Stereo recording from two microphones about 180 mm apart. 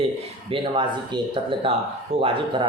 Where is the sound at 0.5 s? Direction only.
25° right (ahead or behind).